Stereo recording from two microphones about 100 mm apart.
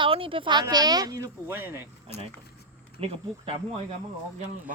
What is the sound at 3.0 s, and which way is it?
Speech, 70° right (ahead or behind).